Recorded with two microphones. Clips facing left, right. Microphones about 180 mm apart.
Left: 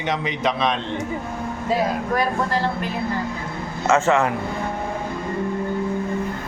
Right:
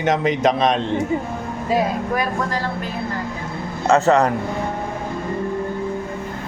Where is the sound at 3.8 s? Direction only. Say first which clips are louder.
Right 3 dB; 35° right (ahead or behind).